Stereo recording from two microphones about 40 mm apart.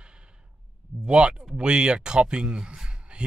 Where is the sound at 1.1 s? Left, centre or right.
Right.